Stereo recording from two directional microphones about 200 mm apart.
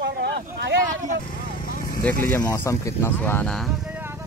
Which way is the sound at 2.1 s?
5° left (ahead or behind).